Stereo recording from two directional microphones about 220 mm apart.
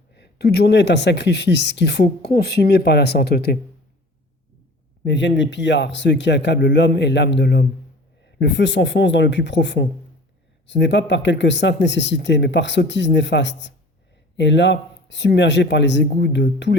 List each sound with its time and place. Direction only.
0.1 s speech: 50° left (ahead or behind)
5.0 s speech: 55° left (ahead or behind)